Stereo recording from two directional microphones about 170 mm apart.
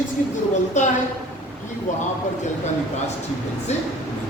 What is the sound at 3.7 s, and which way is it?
Speech, 40° left (ahead or behind).